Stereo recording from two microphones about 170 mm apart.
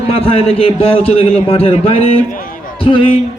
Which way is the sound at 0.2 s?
35° left (ahead or behind).